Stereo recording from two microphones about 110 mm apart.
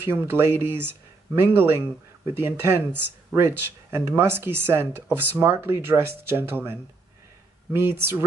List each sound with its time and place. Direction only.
0.0 s speech: 20° right (ahead or behind)